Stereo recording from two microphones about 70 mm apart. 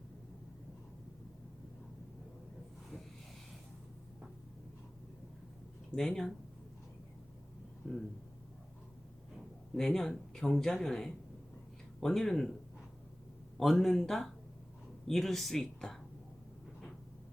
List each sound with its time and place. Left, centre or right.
6.0 s speech: centre
7.8 s a sound: centre
9.7 s speech: centre
13.6 s speech: centre